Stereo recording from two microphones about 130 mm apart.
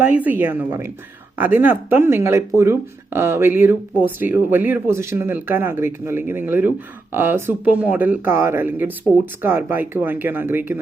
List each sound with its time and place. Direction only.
0.1 s speech: 15° right (ahead or behind)